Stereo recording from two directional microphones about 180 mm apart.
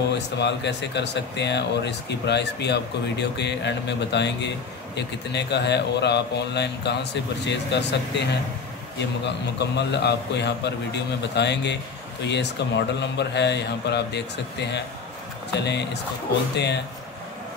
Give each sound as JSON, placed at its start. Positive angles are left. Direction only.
{"t": 0.1, "sound": "speech", "side_deg": 75}